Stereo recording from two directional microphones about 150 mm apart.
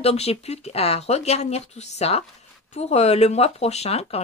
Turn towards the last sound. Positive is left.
turn(degrees=45)  # may be behind; listen again after turning